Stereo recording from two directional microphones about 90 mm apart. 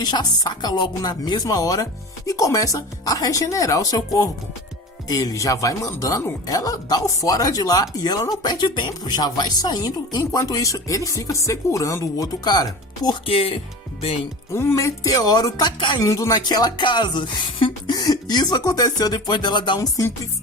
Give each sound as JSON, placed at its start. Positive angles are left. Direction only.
{"t": 0.0, "sound": "speech", "side_deg": 50}
{"t": 13.2, "sound": "speech", "side_deg": 90}
{"t": 14.5, "sound": "speech", "side_deg": 30}